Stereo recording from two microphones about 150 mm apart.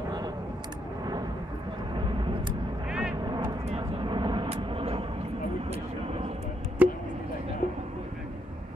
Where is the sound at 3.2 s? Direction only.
25° right (ahead or behind).